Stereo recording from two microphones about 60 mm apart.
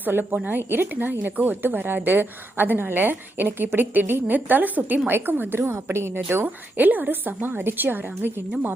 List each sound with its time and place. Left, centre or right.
0.0 s speech: right
6.3 s speech: right